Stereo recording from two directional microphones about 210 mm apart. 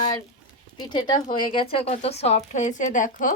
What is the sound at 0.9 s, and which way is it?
Speech, 20° left (ahead or behind).